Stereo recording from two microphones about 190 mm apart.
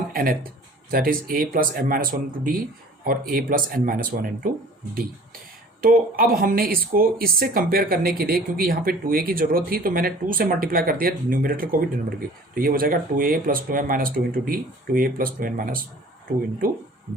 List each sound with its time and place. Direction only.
0.1 s a sound: 50° right (ahead or behind)
0.9 s speech: 50° right (ahead or behind)
5.8 s speech: 50° right (ahead or behind)